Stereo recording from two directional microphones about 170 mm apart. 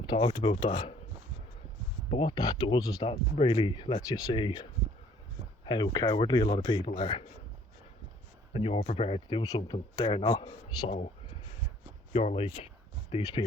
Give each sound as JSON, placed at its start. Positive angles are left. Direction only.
{"t": 0.0, "sound": "speech", "side_deg": 30}
{"t": 2.0, "sound": "speech", "side_deg": 30}
{"t": 8.5, "sound": "speech", "side_deg": 35}
{"t": 9.4, "sound": "speech", "side_deg": 20}
{"t": 12.1, "sound": "speech", "side_deg": 40}